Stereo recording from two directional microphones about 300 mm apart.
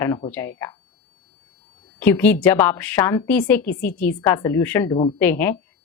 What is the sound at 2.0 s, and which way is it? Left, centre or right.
A woman's voice, centre.